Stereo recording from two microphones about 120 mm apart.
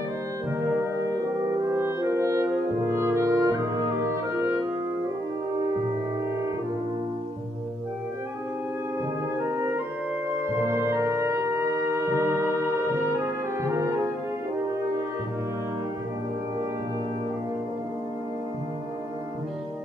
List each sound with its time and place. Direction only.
1.4 s french horn: 20° right (ahead or behind)
4.0 s music: 20° right (ahead or behind)
9.4 s music: 25° right (ahead or behind)